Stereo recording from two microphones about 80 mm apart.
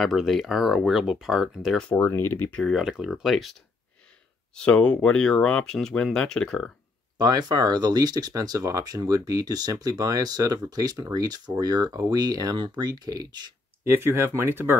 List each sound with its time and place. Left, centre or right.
0.0 s speech: centre
2.0 s speech: left
2.6 s speech: centre
4.6 s speech: centre
7.2 s speech: right
13.8 s speech: right